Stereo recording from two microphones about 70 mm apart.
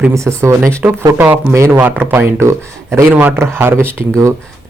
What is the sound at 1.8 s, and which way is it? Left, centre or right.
Speech, right.